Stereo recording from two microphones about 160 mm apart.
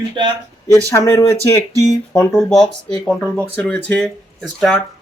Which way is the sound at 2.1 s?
5° left (ahead or behind).